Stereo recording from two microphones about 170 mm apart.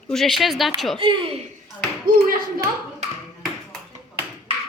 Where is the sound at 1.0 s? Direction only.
30° right (ahead or behind).